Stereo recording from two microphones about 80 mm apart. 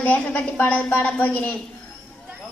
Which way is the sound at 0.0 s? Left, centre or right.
Centre.